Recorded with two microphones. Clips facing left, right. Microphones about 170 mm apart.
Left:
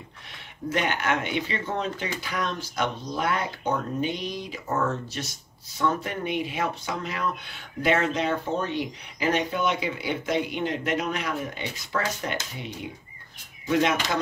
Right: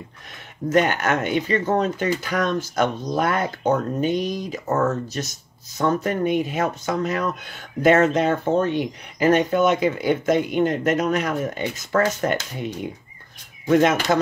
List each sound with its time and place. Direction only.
0.7 s speech: 45° right (ahead or behind)